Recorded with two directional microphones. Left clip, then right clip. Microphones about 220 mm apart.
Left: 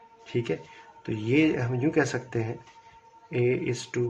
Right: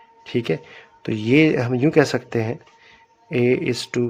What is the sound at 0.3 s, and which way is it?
Speech, 50° right (ahead or behind).